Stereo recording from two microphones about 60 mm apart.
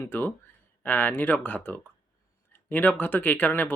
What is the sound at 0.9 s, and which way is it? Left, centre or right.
Speech, left.